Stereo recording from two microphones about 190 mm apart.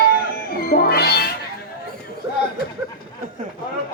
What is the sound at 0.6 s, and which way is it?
Music, 50° left (ahead or behind).